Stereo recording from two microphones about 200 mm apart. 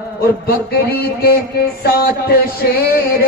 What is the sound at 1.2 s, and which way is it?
Music, 50° left (ahead or behind).